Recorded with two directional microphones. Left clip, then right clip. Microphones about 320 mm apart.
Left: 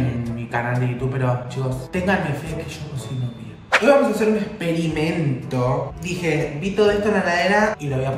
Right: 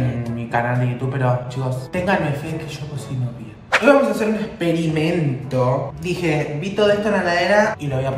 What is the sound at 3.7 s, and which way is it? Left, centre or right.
A man's voice, centre.